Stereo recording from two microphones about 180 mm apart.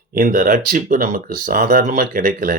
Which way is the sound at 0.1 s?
50° right (ahead or behind).